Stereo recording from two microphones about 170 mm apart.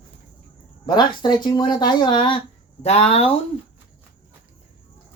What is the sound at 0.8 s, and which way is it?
Speech, 25° left (ahead or behind).